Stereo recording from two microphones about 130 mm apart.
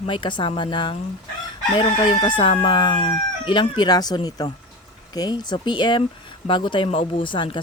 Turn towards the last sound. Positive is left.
turn(degrees=40)  # may be behind; listen again after turning